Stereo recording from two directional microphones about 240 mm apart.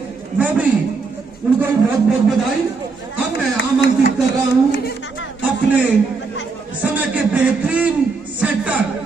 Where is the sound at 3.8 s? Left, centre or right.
Left.